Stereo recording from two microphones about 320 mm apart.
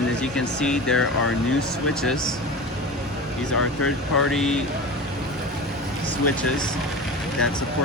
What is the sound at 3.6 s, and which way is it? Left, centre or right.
Speech, left.